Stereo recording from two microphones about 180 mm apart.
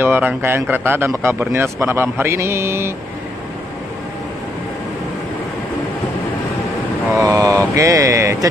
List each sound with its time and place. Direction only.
0.0 s a man's voice: 10° right (ahead or behind)
7.2 s vehicle: 20° right (ahead or behind)
7.7 s a man's voice: 15° right (ahead or behind)